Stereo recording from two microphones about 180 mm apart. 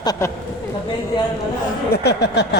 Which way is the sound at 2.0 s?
65° left (ahead or behind).